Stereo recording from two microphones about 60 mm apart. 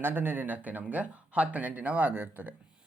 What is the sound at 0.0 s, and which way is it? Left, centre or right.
Speech, right.